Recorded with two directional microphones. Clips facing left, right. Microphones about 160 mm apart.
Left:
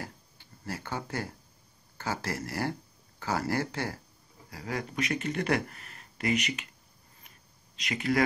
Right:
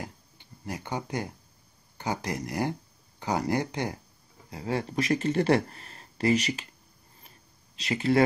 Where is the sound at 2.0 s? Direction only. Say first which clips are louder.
Right 2 dB; 15° right (ahead or behind).